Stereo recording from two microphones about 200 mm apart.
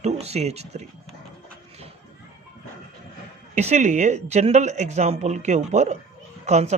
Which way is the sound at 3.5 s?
35° right (ahead or behind).